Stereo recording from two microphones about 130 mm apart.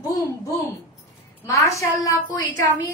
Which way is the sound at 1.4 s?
25° left (ahead or behind).